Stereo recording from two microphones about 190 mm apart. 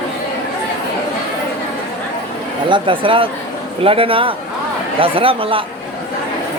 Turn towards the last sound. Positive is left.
turn(degrees=-30)  # may be behind; listen again after turning